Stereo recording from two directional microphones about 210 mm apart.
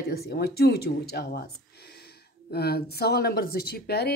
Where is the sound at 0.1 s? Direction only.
50° left (ahead or behind).